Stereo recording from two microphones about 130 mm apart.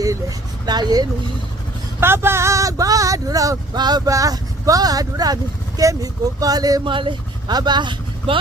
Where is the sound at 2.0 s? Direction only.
20° right (ahead or behind).